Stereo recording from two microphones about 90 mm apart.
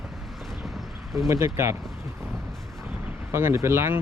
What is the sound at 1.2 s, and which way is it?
Speech, 30° right (ahead or behind).